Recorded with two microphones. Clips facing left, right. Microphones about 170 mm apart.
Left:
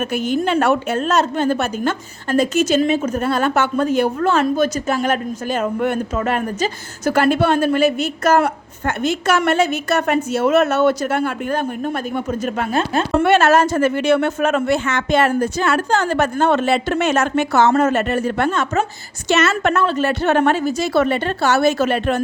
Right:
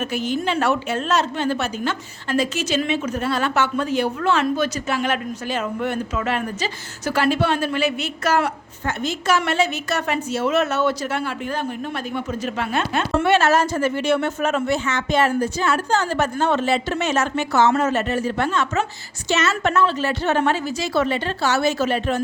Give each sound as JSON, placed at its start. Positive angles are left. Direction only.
{"t": 0.1, "sound": "a woman's voice", "side_deg": 50}
{"t": 13.1, "sound": "a woman's voice", "side_deg": 55}